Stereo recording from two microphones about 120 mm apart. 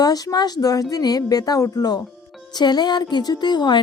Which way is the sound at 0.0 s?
30° left (ahead or behind).